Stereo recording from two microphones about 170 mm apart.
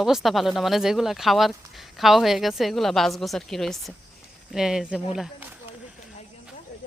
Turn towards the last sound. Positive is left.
turn(degrees=-5)  # may be behind; listen again after turning